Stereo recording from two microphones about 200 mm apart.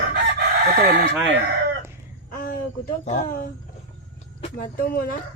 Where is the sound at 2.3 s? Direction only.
45° left (ahead or behind).